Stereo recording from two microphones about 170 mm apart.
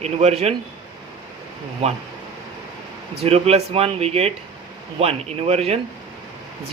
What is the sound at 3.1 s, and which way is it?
A man's voice, 35° right (ahead or behind).